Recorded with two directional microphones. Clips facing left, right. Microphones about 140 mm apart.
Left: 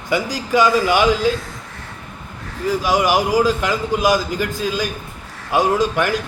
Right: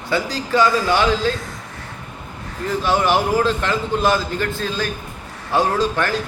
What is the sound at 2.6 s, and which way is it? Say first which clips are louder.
A man's voice: left 1 dB; 10° left (ahead or behind).